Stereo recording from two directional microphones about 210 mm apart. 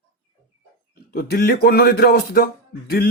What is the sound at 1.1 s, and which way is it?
Speech, 45° left (ahead or behind).